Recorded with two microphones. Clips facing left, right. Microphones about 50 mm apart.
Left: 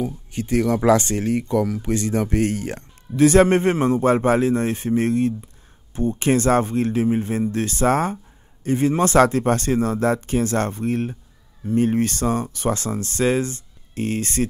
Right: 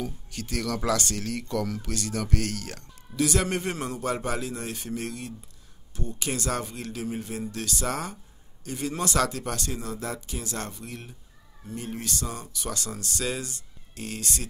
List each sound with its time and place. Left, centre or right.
0.0 s speech: left